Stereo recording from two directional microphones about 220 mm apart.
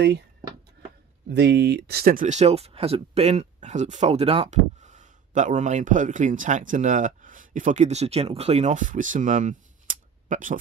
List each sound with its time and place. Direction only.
1.3 s speech: 50° right (ahead or behind)